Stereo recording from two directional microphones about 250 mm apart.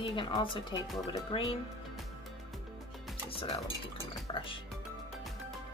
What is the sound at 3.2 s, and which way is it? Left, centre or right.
A woman's voice, left.